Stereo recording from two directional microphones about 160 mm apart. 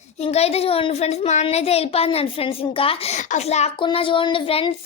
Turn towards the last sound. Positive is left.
turn(degrees=35)  # may be behind; listen again after turning